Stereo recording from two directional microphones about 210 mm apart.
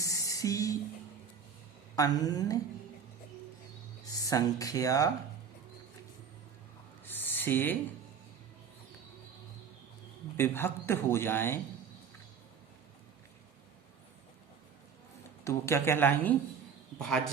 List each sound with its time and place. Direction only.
0.0 s a sound: 15° left (ahead or behind)
2.0 s speech: 15° left (ahead or behind)
4.0 s speech: 15° left (ahead or behind)
7.0 s a sound: 10° left (ahead or behind)
10.3 s speech: 10° left (ahead or behind)
15.4 s speech: 15° left (ahead or behind)